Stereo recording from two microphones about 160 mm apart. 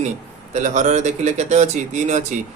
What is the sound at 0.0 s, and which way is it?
Speech, 50° right (ahead or behind).